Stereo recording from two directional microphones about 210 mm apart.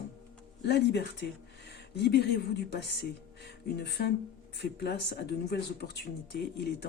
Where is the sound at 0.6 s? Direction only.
55° left (ahead or behind).